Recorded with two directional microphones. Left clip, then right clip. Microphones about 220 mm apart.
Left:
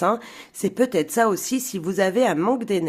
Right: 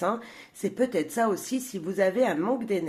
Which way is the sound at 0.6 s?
35° left (ahead or behind).